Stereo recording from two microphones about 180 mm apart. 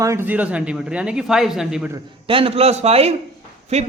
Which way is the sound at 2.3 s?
30° right (ahead or behind).